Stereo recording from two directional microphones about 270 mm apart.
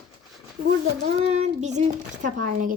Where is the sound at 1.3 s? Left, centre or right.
Right.